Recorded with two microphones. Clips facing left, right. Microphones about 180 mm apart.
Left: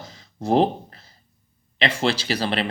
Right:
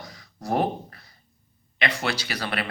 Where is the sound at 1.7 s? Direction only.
30° left (ahead or behind).